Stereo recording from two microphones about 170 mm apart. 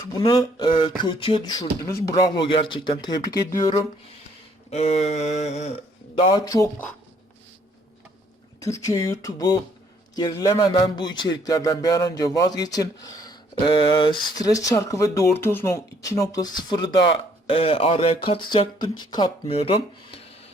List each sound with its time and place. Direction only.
0.1 s speech: 25° left (ahead or behind)
4.7 s a sound: 40° left (ahead or behind)
6.1 s speech: 25° left (ahead or behind)
8.6 s speech: 20° left (ahead or behind); by 20.3 s 35° left (ahead or behind)